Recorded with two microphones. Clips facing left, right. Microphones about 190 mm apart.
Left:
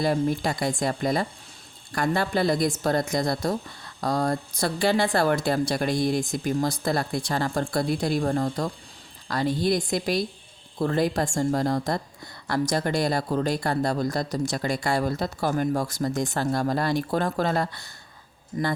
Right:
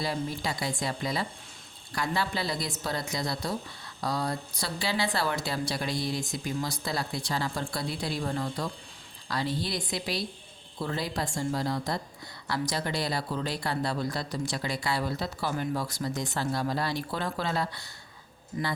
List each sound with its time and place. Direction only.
0.0 s speech: 50° left (ahead or behind)